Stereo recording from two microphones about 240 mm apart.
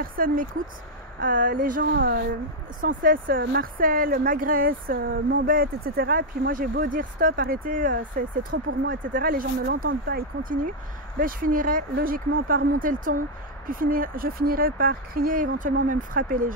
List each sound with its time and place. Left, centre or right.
0.0 s speech: right